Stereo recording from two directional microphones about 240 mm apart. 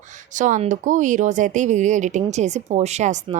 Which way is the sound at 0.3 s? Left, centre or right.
Right.